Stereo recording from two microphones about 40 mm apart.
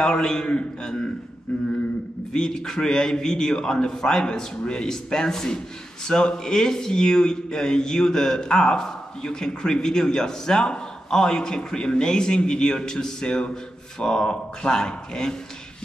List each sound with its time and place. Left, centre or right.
0.0 s a man's voice: centre
2.3 s a man's voice: centre